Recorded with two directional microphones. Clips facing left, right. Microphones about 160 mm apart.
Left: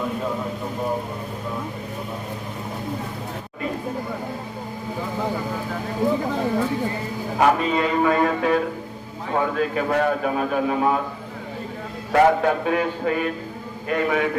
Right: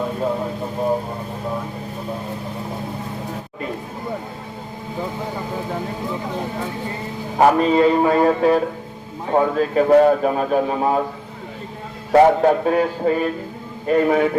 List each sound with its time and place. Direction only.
7.3 s a man's voice: 35° right (ahead or behind)
12.1 s a man's voice: 35° right (ahead or behind)